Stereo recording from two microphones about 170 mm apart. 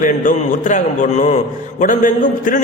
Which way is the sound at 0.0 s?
50° left (ahead or behind).